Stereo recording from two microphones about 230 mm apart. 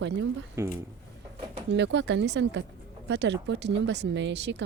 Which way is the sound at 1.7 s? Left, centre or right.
Right.